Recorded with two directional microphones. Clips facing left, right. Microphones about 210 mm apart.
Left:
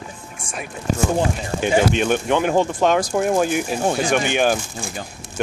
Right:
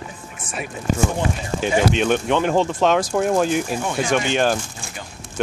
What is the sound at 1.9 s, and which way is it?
Speech, 5° left (ahead or behind).